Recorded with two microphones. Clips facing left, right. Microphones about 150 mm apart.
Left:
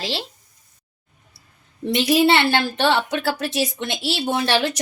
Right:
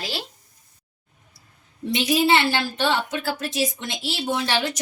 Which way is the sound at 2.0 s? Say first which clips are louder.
Left 3 dB; 70° left (ahead or behind).